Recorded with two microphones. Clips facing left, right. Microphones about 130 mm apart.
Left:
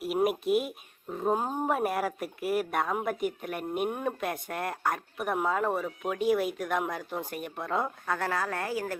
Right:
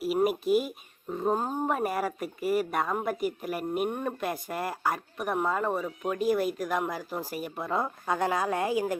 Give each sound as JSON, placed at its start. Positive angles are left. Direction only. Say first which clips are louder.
{"t": 0.2, "sound": "speech", "louder": "even", "side_deg": 0}
{"t": 8.0, "sound": "a woman's voice", "louder": "right 3 dB", "side_deg": -20}